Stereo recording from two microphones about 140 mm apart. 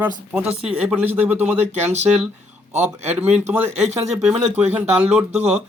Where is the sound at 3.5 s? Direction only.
20° right (ahead or behind).